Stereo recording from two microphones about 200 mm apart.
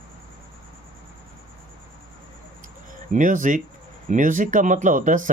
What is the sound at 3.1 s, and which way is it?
Speech, 40° right (ahead or behind).